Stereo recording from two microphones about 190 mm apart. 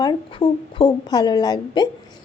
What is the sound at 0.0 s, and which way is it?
A woman's voice, 25° left (ahead or behind).